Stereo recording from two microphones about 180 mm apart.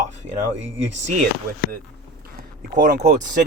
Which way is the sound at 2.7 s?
50° right (ahead or behind).